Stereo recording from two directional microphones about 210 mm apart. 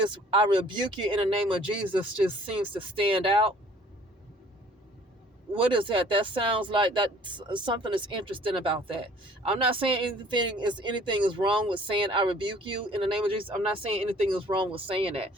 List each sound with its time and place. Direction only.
0.1 s speech: 25° right (ahead or behind)
5.5 s speech: 25° right (ahead or behind)